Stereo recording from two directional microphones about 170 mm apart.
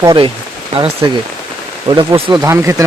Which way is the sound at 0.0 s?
25° right (ahead or behind).